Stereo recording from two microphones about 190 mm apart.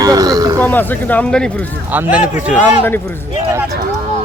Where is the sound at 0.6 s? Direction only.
10° left (ahead or behind).